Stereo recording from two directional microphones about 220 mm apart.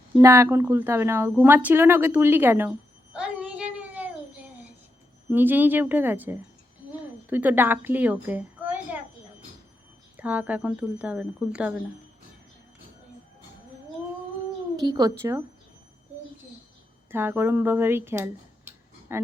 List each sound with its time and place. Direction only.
0.2 s speech: 15° right (ahead or behind)
5.3 s a woman's voice: 10° right (ahead or behind)
10.2 s speech: 5° right (ahead or behind)
14.8 s speech: 20° right (ahead or behind)
17.1 s speech: 10° right (ahead or behind)